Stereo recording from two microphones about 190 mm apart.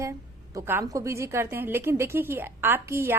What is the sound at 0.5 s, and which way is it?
A woman's voice, 15° right (ahead or behind).